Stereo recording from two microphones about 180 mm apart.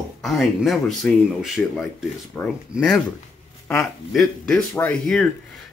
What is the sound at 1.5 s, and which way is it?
A man's voice, centre (ahead or behind).